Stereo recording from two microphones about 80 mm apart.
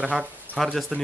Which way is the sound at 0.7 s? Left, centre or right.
Centre.